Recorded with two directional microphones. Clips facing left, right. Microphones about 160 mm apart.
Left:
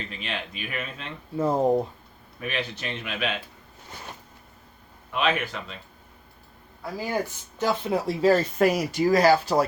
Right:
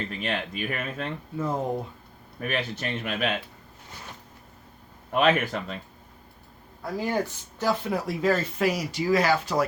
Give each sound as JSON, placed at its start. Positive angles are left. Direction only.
{"t": 0.1, "sound": "speech", "side_deg": -45}
{"t": 1.4, "sound": "speech", "side_deg": 35}
{"t": 2.4, "sound": "speech", "side_deg": -45}
{"t": 5.1, "sound": "speech", "side_deg": -45}
{"t": 6.9, "sound": "speech", "side_deg": 5}
{"t": 7.6, "sound": "speech", "side_deg": 25}